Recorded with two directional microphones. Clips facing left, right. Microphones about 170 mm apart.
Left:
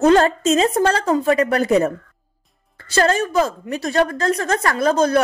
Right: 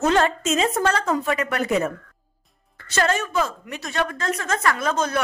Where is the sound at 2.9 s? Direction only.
35° left (ahead or behind).